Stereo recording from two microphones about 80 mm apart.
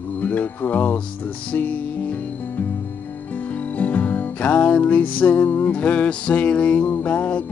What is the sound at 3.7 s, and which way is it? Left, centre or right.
Music, centre.